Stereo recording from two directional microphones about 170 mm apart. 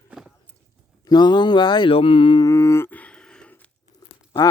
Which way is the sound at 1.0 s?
25° left (ahead or behind).